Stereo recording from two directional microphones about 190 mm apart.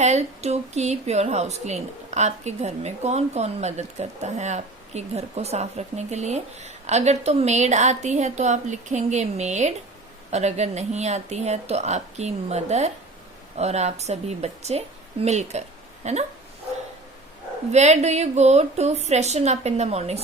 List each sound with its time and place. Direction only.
0.0 s a woman's voice: 35° right (ahead or behind)
17.7 s a woman's voice: 35° right (ahead or behind)